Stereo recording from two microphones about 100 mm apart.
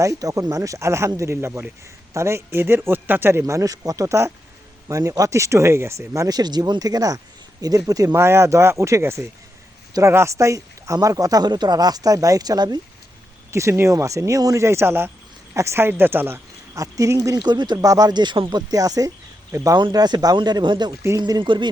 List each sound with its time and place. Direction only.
0.0 s speech: 35° right (ahead or behind)
13.5 s speech: 30° right (ahead or behind)
16.7 s speech: 35° right (ahead or behind)
17.7 s speech: 35° right (ahead or behind)
19.7 s speech: 40° right (ahead or behind)